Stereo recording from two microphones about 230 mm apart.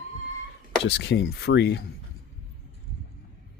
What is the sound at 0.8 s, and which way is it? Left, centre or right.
Speech, left.